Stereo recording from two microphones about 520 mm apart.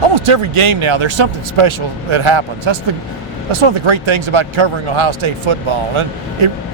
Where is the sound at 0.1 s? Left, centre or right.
Right.